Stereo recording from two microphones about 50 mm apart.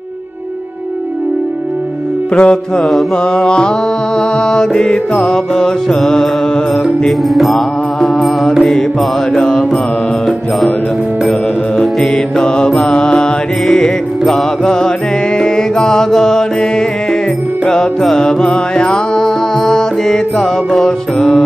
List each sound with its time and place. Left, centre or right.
2.3 s music: centre
2.8 s music: centre
3.3 s music: centre
7.1 s music: centre
8.0 s mantra: centre
9.3 s music: centre
11.2 s mantra: centre
12.7 s music: centre